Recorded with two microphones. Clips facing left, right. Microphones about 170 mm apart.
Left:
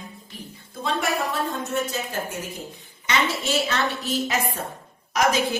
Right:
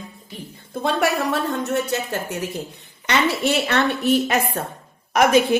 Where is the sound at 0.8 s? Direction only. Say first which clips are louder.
Right 5 dB; 70° right (ahead or behind).